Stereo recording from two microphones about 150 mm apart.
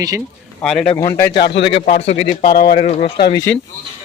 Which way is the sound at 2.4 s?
80° left.